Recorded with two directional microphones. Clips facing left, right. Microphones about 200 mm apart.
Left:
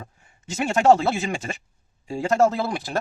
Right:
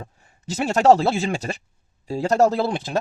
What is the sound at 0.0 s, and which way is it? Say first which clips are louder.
A man's voice: right 4 dB; 35° right (ahead or behind).